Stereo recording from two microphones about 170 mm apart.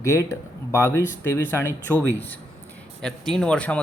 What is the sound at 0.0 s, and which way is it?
Speech, 15° left (ahead or behind).